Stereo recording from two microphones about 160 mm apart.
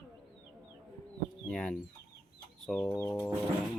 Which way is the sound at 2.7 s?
15° left (ahead or behind).